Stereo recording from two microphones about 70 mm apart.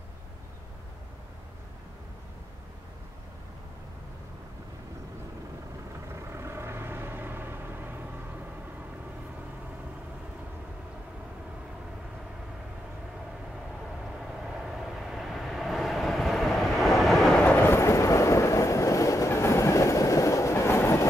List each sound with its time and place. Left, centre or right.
6.0 s vehicle: right
14.4 s vehicle: centre
17.3 s train: centre
17.6 s train: left